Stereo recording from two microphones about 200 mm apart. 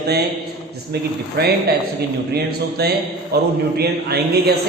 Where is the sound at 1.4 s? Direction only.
55° right (ahead or behind).